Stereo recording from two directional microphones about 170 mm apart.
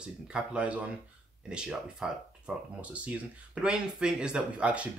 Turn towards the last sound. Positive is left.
turn(degrees=-5)  # may be behind; listen again after turning